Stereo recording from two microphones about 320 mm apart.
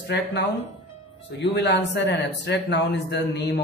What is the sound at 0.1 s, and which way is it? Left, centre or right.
Speech, left.